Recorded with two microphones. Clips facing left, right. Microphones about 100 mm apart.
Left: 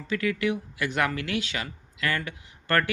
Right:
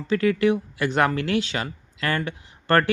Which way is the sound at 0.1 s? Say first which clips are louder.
Right 7 dB; 35° right (ahead or behind).